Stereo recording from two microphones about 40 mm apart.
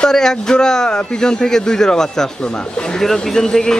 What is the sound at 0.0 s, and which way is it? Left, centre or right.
A man's voice, centre.